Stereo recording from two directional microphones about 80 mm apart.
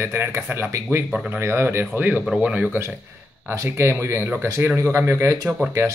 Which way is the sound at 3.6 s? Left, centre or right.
Right.